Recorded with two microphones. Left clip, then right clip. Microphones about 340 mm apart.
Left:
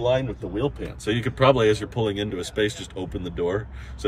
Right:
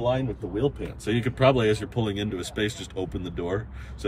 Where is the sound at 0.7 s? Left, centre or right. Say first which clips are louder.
Left 1 dB; centre.